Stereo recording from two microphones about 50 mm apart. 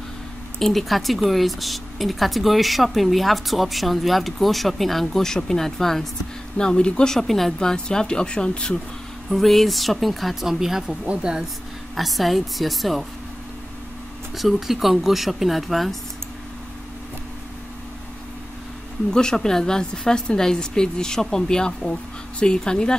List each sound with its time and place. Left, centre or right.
0.6 s a woman's voice: centre
9.3 s speech: centre
11.9 s speech: centre
14.3 s speech: centre
19.0 s a woman's voice: centre